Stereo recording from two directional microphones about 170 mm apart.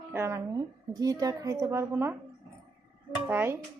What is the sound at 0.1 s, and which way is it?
A woman's voice, 15° right (ahead or behind).